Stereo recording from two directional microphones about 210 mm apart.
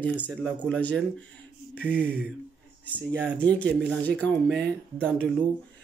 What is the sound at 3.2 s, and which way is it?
Speech, 5° left (ahead or behind).